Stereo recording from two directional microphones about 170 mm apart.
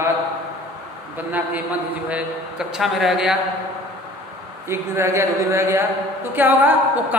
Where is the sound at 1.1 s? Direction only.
10° right (ahead or behind).